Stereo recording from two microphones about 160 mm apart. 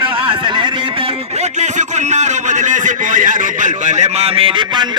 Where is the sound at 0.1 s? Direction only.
30° right (ahead or behind).